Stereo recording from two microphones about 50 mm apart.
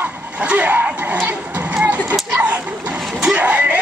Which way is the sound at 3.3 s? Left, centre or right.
Right.